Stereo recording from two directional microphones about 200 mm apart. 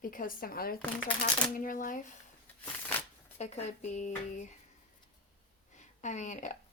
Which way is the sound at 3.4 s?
35° left (ahead or behind).